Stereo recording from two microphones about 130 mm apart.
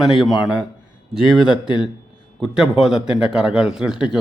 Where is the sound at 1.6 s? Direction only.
35° left (ahead or behind).